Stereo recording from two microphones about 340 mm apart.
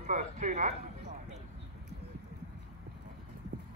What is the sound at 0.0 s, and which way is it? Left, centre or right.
A man's voice, right.